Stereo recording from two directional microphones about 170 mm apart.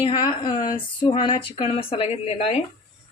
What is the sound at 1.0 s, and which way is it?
Speech, 30° left (ahead or behind).